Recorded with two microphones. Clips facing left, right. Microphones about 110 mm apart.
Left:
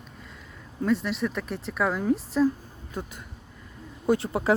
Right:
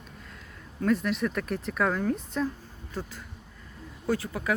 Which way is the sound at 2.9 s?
20° left (ahead or behind).